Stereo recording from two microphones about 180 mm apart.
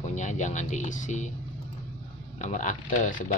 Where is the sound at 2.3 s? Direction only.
45° left (ahead or behind).